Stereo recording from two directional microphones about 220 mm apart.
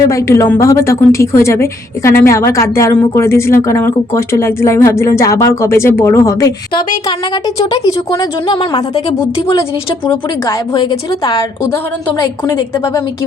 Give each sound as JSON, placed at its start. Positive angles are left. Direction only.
{"t": 0.1, "sound": "a woman's voice", "side_deg": 15}